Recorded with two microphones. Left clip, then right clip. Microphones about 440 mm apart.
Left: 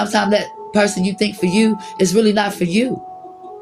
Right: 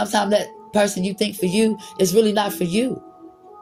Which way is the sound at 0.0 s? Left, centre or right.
Right.